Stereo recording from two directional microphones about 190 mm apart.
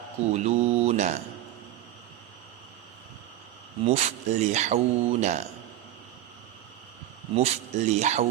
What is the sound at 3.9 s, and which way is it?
Speech, 35° right (ahead or behind).